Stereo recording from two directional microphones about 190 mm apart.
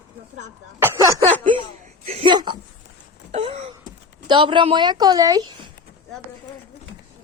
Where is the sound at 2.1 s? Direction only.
30° right (ahead or behind).